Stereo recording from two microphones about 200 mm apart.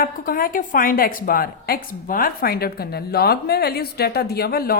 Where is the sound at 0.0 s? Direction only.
45° left (ahead or behind).